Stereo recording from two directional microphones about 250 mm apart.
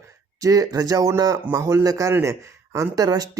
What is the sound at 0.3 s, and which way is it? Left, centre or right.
Speech, centre.